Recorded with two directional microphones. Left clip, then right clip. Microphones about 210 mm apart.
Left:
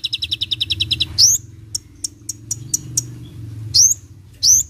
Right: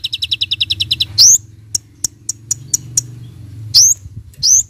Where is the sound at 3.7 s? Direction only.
25° right (ahead or behind).